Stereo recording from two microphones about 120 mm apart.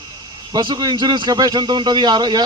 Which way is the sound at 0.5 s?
35° right (ahead or behind).